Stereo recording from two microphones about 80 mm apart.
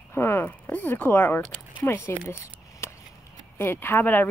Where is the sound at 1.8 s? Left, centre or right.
Left.